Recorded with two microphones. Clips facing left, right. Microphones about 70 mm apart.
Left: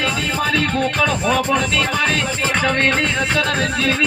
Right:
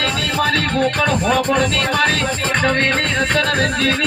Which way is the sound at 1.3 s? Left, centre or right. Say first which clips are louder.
Right 1 dB; right.